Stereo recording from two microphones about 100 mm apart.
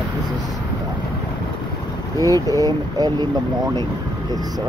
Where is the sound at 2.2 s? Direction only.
35° right (ahead or behind).